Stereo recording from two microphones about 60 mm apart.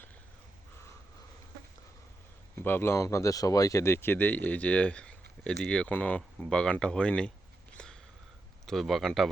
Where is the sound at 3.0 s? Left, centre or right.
Left.